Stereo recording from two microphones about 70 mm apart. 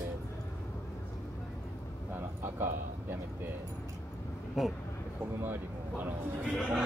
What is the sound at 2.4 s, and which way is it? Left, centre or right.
Speech, right.